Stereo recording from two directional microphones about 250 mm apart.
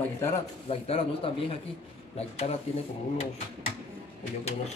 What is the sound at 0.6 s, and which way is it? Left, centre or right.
Speech, left.